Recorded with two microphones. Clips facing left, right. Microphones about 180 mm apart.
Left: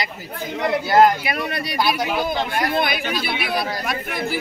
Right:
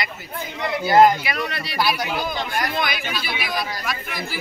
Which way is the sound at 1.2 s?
50° left (ahead or behind).